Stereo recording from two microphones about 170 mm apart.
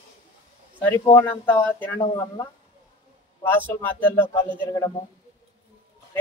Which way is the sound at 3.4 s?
10° left (ahead or behind).